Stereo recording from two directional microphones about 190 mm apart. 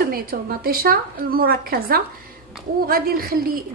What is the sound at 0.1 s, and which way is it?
A woman's voice, 50° right (ahead or behind).